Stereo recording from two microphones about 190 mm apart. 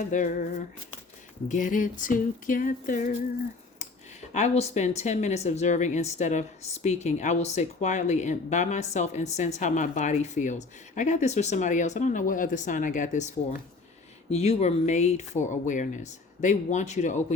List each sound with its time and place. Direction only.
0.0 s speech: 40° left (ahead or behind)
1.5 s a sound: 45° left (ahead or behind)
3.8 s speech: 40° left (ahead or behind)